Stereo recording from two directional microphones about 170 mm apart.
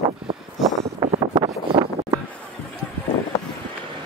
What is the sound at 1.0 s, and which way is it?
Wind noise, 30° right (ahead or behind).